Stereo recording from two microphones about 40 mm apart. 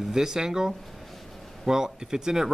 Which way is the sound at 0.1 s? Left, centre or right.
Centre.